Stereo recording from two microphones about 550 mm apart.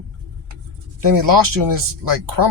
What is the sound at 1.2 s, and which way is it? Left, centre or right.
Speech, right.